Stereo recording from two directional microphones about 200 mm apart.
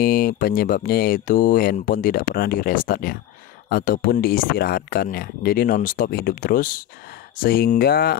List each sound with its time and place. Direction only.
0.0 s speech: 45° left (ahead or behind)